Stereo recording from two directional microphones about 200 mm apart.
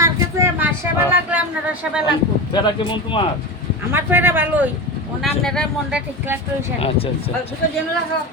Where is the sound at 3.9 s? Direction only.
10° right (ahead or behind).